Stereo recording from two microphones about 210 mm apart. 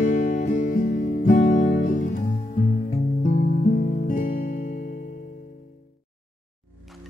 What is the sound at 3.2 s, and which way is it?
Guitar, 35° left (ahead or behind).